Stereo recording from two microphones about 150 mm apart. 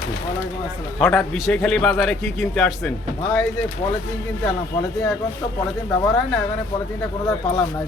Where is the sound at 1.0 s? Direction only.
15° left (ahead or behind).